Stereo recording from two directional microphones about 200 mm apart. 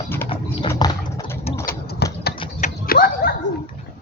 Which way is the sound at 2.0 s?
55° left (ahead or behind).